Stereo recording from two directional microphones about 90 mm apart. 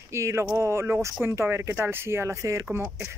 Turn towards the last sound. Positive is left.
turn(degrees=-30)  # may be behind; listen again after turning